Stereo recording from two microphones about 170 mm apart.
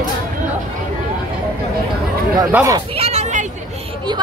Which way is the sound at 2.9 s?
40° right (ahead or behind).